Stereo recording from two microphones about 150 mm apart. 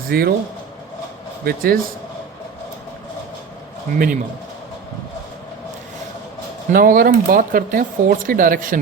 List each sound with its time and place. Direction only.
0.1 s speech: 90° right
1.5 s speech: 75° right (ahead or behind)
3.9 s speech: 70° right (ahead or behind)
6.7 s speech: 70° right (ahead or behind)